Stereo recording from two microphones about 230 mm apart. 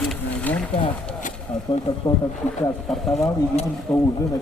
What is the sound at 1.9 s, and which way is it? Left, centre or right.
Speech, centre.